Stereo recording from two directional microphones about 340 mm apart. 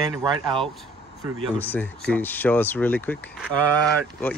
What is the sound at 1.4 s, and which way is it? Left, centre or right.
Speech, centre.